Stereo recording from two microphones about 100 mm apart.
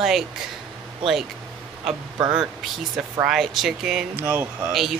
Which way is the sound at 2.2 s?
5° right (ahead or behind).